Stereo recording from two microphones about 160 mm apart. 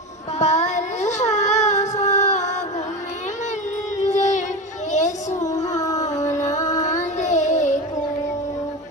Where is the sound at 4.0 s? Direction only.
45° left (ahead or behind).